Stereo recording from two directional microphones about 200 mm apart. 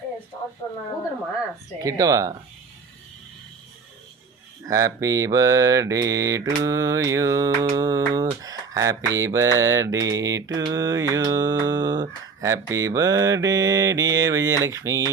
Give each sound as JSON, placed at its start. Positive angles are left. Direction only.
{"t": 0.6, "sound": "speech", "side_deg": 15}
{"t": 1.8, "sound": "mantra", "side_deg": -15}
{"t": 4.6, "sound": "mantra", "side_deg": -15}